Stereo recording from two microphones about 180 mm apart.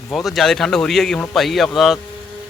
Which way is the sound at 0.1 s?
Centre (ahead or behind).